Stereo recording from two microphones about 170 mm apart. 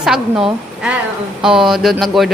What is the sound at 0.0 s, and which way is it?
A woman's voice, 5° right (ahead or behind).